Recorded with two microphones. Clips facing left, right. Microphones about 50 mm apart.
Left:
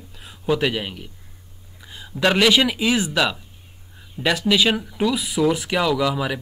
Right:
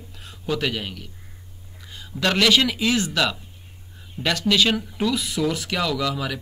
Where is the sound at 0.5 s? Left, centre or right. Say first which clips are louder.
Left 1 dB; centre.